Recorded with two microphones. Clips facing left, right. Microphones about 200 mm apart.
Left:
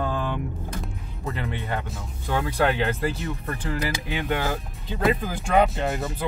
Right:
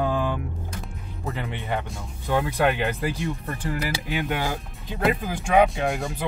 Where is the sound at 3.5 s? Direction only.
Centre (ahead or behind).